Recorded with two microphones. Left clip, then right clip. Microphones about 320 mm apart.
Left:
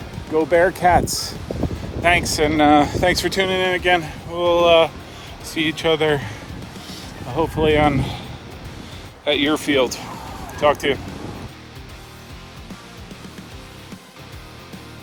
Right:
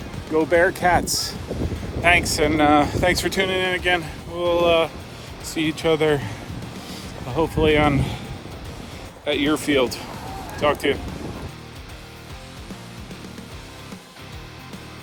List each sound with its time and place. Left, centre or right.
0.3 s speech: centre
9.2 s speech: centre